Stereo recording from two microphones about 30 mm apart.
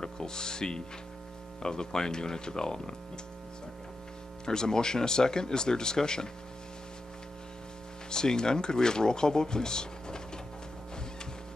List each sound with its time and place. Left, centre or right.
0.0 s speech: left
4.5 s speech: left
8.1 s speech: left